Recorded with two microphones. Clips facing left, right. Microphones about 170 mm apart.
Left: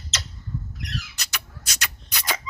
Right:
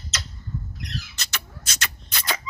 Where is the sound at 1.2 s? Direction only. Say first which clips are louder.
Right 1 dB; 15° left (ahead or behind).